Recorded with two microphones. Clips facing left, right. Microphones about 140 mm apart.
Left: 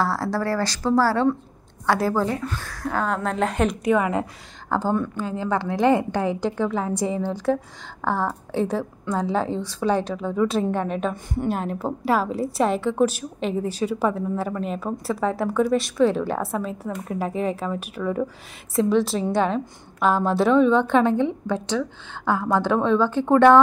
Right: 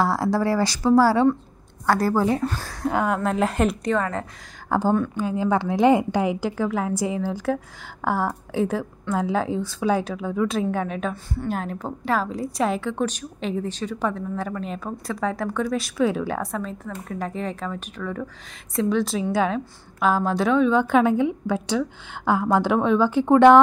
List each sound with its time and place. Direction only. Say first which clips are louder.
0.0 s a woman's voice: right 2 dB; 15° right (ahead or behind)
1.9 s a woman's voice: right 1 dB; centre (ahead or behind)
2.3 s speech: right 4 dB; 35° right (ahead or behind)
2.8 s a woman's voice: right 2 dB; 15° right (ahead or behind)
3.9 s a woman's voice: left 3 dB; 15° left (ahead or behind)
4.6 s a woman's voice: right 2 dB; 15° right (ahead or behind)